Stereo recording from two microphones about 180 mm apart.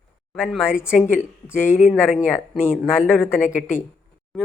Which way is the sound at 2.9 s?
10° left (ahead or behind).